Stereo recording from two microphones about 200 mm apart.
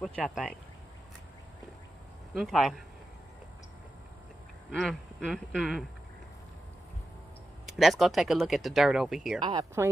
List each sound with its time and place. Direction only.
0.0 s speech: 5° left (ahead or behind)
2.3 s speech: centre (ahead or behind)
4.6 s speech: centre (ahead or behind)
7.6 s speech: centre (ahead or behind)
9.4 s speech: 25° right (ahead or behind)